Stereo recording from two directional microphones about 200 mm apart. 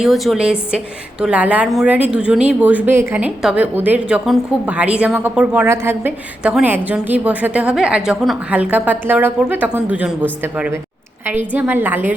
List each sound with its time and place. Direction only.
0.0 s a woman's voice: centre (ahead or behind)